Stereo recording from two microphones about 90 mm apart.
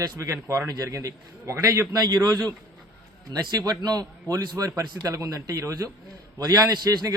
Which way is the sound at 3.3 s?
45° right (ahead or behind).